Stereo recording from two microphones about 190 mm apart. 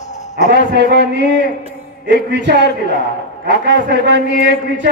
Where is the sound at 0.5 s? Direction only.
55° right (ahead or behind).